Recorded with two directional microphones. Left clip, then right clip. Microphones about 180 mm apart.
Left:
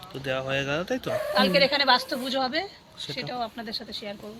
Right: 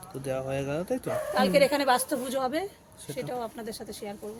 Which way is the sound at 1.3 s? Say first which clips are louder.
Left 1 dB; 90° right.